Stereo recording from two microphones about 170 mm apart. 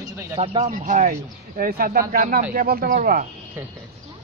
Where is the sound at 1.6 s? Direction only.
60° right (ahead or behind).